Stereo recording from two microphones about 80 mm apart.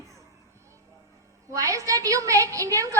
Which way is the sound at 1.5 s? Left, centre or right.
Right.